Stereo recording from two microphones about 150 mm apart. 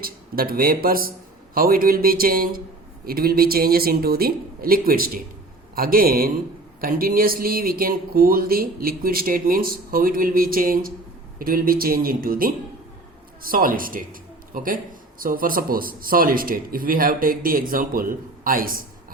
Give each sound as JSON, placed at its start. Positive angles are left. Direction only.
{"t": 0.0, "sound": "speech", "side_deg": -80}
{"t": 3.1, "sound": "speech", "side_deg": -90}